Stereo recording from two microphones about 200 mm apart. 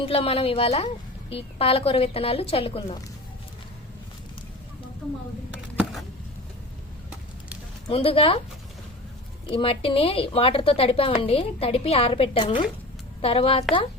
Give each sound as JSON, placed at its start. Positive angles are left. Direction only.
{"t": 0.0, "sound": "a woman's voice", "side_deg": 30}
{"t": 5.7, "sound": "a sound", "side_deg": 0}
{"t": 7.9, "sound": "a woman's voice", "side_deg": 30}
{"t": 9.5, "sound": "a woman's voice", "side_deg": 25}